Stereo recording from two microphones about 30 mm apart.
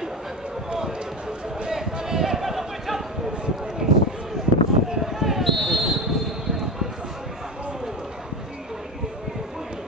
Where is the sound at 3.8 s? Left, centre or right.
Right.